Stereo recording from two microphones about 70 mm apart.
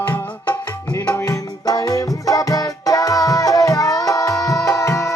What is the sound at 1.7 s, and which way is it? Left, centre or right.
Music, left.